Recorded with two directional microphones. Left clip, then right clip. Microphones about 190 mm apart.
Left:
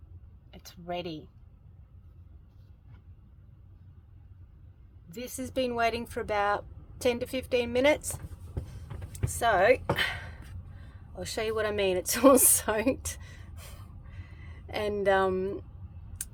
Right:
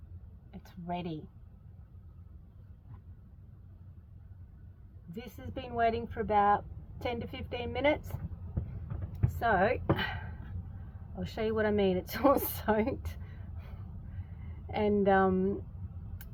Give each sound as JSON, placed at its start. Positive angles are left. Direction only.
{"t": 0.5, "sound": "speech", "side_deg": 20}
{"t": 5.1, "sound": "a woman's voice", "side_deg": 20}
{"t": 9.1, "sound": "a sound", "side_deg": 20}
{"t": 11.3, "sound": "a woman's voice", "side_deg": 25}
{"t": 14.7, "sound": "a woman's voice", "side_deg": 25}